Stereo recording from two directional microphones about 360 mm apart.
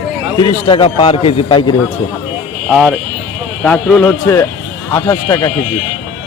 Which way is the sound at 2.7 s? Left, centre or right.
Centre.